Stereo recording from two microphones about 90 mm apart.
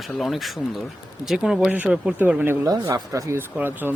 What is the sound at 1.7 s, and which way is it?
Speech, 15° right (ahead or behind).